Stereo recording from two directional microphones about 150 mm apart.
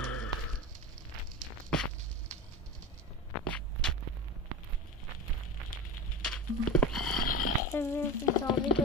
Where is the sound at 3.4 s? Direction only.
10° left (ahead or behind).